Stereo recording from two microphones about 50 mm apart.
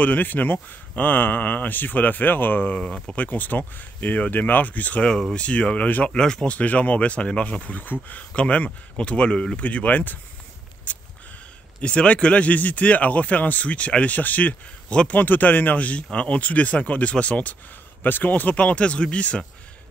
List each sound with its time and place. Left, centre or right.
0.0 s speech: left
6.0 s speech: centre
6.4 s speech: left
8.3 s speech: left
9.6 s speech: left
11.8 s speech: left
18.0 s speech: left